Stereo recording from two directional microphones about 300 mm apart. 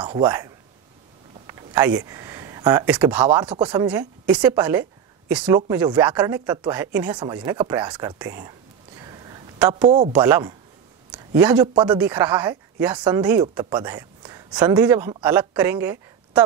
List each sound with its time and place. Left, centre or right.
0.0 s speech: centre
1.5 s speech: centre